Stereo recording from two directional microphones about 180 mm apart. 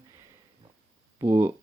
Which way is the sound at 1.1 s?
15° right (ahead or behind).